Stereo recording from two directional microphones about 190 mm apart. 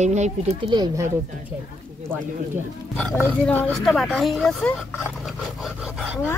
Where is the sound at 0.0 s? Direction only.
35° right (ahead or behind); by 1.1 s 20° right (ahead or behind).